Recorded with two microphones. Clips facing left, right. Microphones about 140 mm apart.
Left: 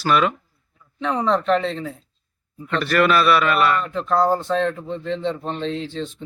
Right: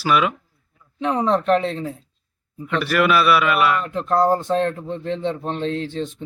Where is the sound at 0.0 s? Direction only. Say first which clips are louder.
Even; 5° right (ahead or behind).